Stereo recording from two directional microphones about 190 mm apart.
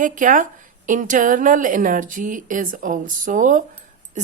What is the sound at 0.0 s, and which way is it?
A woman's voice, 45° right (ahead or behind).